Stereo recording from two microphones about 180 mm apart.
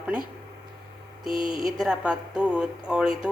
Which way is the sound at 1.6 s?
5° right (ahead or behind).